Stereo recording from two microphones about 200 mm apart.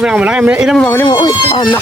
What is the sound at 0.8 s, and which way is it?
Speech, 10° left (ahead or behind).